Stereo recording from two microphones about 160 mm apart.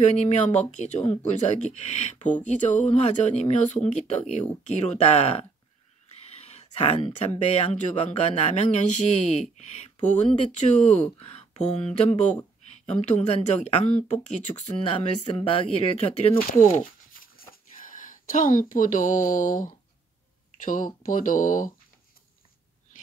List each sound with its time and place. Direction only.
0.0 s speech: 40° left (ahead or behind)
11.1 s speech: 40° left (ahead or behind)
15.0 s speech: 35° left (ahead or behind)
16.3 s speech: 50° left (ahead or behind)